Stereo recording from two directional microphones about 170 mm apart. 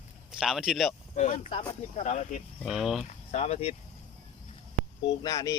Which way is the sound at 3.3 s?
40° left (ahead or behind).